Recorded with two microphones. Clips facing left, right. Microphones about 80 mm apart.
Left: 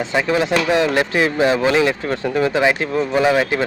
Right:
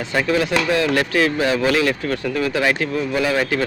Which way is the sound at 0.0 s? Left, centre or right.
Left.